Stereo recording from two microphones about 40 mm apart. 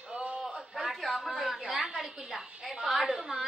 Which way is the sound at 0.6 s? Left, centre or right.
Centre.